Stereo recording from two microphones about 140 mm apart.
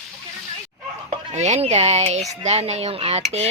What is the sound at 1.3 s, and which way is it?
Speech, 50° right (ahead or behind).